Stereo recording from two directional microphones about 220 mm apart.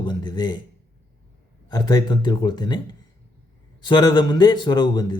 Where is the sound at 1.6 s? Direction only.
20° left (ahead or behind).